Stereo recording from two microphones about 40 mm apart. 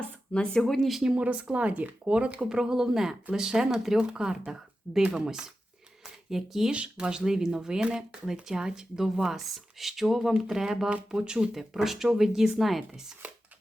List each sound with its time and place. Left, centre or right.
0.3 s speech: centre
1.1 s speech: right
2.5 s speech: centre
6.7 s speech: right; by 10.8 s centre
10.8 s speech: right
11.2 s speech: centre
11.5 s speech: centre